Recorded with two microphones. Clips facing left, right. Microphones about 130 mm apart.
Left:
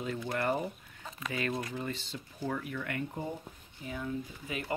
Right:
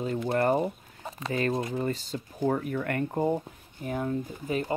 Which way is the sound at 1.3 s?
40° right (ahead or behind).